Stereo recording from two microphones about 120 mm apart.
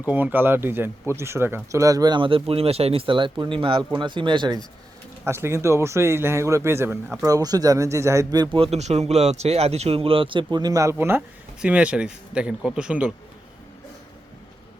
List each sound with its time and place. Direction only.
0.0 s speech: 15° right (ahead or behind); by 4.6 s 40° right (ahead or behind)
5.2 s a man's voice: 20° right (ahead or behind)
7.2 s speech: 30° right (ahead or behind)
8.5 s speech: 55° right (ahead or behind); by 13.1 s 10° right (ahead or behind)